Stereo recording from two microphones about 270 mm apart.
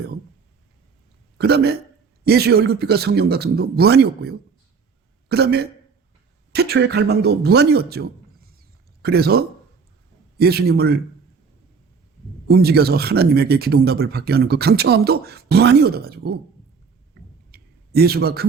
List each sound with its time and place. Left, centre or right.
1.4 s speech: right
10.4 s speech: right
12.5 s speech: right
17.5 s a sound: right